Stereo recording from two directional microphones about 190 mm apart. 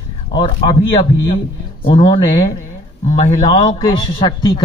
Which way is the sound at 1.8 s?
30° left (ahead or behind).